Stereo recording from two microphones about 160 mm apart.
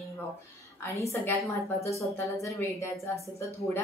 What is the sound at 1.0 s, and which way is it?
Speech, 15° left (ahead or behind).